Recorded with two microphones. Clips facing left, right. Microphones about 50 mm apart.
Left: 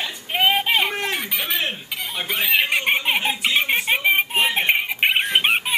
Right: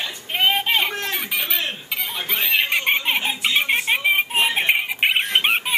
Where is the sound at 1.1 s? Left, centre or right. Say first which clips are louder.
Even; centre.